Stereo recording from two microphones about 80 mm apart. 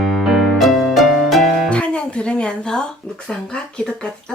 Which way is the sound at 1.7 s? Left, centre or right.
Centre.